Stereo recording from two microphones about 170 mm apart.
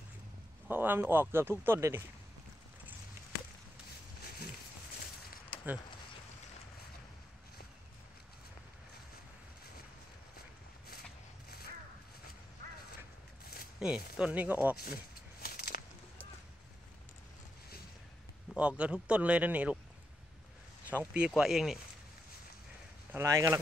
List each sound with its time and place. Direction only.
0.7 s speech: 10° right (ahead or behind)
13.7 s speech: 5° right (ahead or behind)
15.4 s a sound: 60° left (ahead or behind)
18.6 s speech: 5° right (ahead or behind)
21.0 s speech: 5° right (ahead or behind)
23.1 s speech: 15° right (ahead or behind)